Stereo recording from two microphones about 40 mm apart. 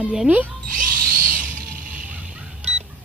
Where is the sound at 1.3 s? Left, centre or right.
Right.